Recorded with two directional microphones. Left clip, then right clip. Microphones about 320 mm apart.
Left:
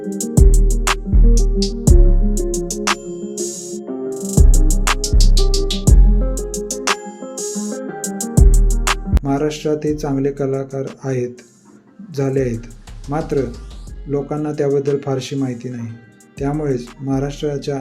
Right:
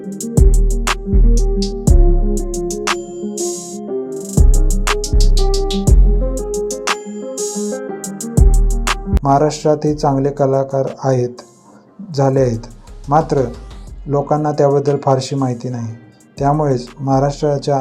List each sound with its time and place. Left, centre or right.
0.0 s music: centre
12.1 s speech: centre